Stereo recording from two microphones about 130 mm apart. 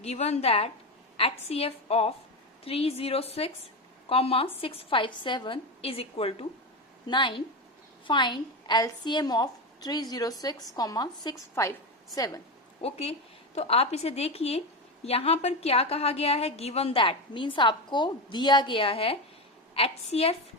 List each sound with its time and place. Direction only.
0.0 s a woman's voice: 55° left (ahead or behind)
7.1 s a woman's voice: 35° left (ahead or behind)
12.8 s a woman's voice: 50° left (ahead or behind)